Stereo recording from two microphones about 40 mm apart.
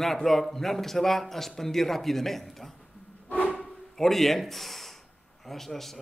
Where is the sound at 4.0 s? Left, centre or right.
Centre.